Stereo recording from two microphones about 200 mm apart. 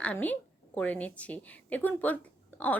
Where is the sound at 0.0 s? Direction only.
5° left (ahead or behind).